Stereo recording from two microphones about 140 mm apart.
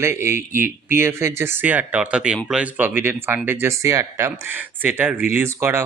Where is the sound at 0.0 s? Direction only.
20° right (ahead or behind).